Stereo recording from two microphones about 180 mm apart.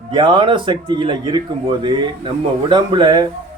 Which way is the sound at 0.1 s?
25° right (ahead or behind).